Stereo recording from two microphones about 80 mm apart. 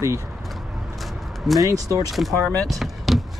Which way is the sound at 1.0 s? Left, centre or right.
Centre.